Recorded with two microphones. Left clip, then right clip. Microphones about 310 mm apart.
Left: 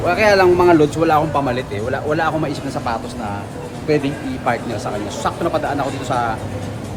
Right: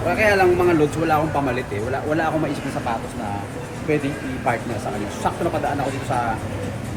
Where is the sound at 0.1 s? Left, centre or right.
Centre.